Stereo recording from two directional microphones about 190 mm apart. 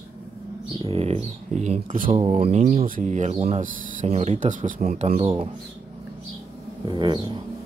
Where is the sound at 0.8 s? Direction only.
30° right (ahead or behind).